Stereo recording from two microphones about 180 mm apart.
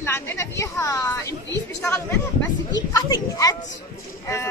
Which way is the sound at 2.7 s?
20° left (ahead or behind).